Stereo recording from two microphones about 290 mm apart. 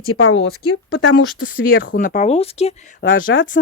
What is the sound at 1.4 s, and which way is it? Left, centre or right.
Speech, left.